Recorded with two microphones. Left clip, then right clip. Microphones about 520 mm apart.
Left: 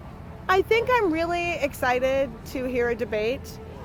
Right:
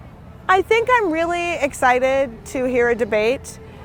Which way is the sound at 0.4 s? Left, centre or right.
Right.